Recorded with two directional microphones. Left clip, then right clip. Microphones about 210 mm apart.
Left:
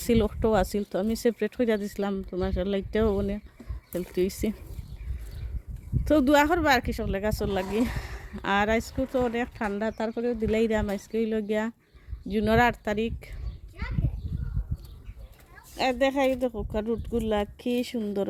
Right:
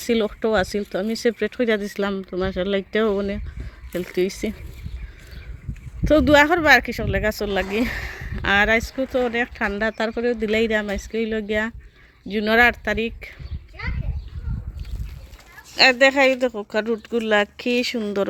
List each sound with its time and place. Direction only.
0.0 s speech: 5° left (ahead or behind)
6.1 s speech: centre (ahead or behind)
10.5 s speech: centre (ahead or behind)
15.7 s speech: 5° left (ahead or behind)